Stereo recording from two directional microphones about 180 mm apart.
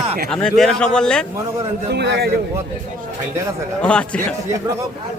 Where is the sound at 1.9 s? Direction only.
70° right (ahead or behind).